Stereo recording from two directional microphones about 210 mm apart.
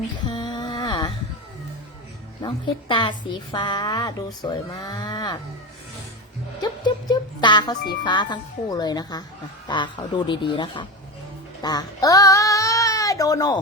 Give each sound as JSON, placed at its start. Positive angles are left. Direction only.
{"t": 0.3, "sound": "a sound", "side_deg": 20}
{"t": 2.4, "sound": "a woman's voice", "side_deg": 20}
{"t": 6.6, "sound": "a woman's voice", "side_deg": 20}